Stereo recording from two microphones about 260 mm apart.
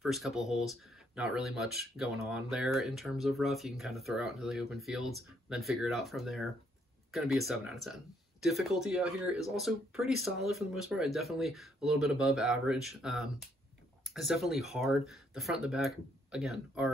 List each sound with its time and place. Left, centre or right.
0.0 s speech: centre